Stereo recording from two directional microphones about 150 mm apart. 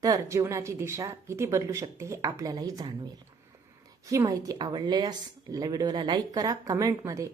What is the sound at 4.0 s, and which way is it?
A woman's voice, 20° right (ahead or behind).